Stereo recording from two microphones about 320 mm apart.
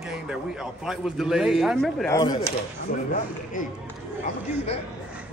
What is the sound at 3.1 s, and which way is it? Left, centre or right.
Speech, left.